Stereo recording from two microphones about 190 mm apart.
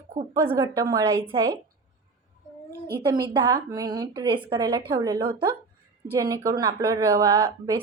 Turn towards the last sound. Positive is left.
turn(degrees=-20)  # may be behind; listen again after turning